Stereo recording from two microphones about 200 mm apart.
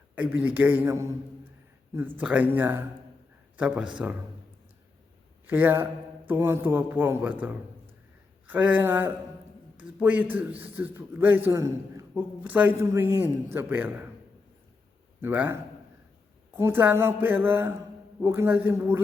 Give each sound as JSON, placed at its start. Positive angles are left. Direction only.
{"t": 0.2, "sound": "a man's voice", "side_deg": -10}
{"t": 5.5, "sound": "a man's voice", "side_deg": -10}
{"t": 15.2, "sound": "a man's voice", "side_deg": -10}